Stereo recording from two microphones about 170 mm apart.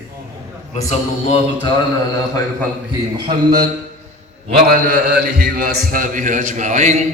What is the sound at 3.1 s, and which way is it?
Speech, 25° right (ahead or behind).